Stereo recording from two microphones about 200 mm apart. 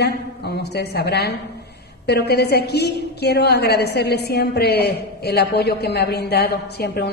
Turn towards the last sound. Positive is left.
turn(degrees=55)  # may be behind; listen again after turning